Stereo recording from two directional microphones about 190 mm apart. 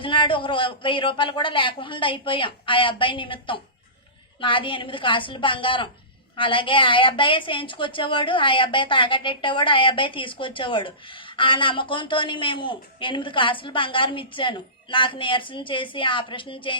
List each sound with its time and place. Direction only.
0.0 s a woman's voice: 25° left (ahead or behind)